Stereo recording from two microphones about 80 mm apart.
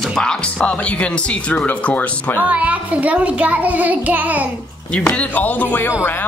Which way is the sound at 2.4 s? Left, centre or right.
Centre.